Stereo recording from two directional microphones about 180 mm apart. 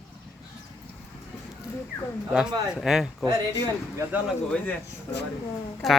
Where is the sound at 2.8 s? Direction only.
Centre (ahead or behind).